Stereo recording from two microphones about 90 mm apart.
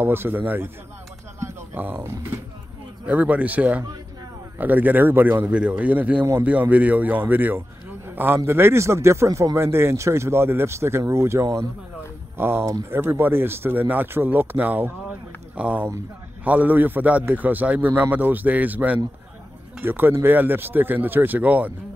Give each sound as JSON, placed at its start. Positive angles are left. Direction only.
{"t": 0.0, "sound": "a man's voice", "side_deg": -25}
{"t": 1.4, "sound": "music", "side_deg": -30}
{"t": 2.0, "sound": "a man's voice", "side_deg": -30}
{"t": 3.1, "sound": "a man's voice", "side_deg": -15}